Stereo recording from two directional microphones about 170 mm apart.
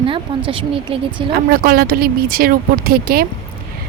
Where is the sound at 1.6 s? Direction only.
60° right (ahead or behind).